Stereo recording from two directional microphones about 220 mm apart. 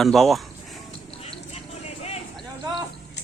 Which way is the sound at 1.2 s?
25° left (ahead or behind).